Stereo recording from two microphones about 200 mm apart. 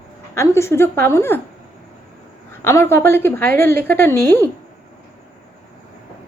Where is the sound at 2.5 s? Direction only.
10° left (ahead or behind).